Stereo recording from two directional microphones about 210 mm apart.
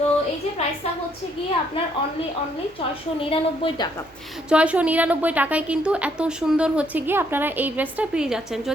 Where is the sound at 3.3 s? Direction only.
25° left (ahead or behind).